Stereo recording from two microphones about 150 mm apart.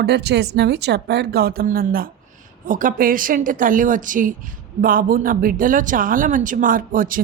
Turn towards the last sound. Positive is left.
turn(degrees=-65)  # may be behind; listen again after turning